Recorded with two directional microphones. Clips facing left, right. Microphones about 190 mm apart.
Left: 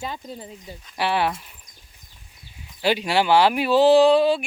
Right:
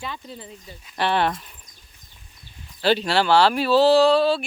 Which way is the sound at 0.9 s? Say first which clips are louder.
Right 1 dB; 10° left (ahead or behind).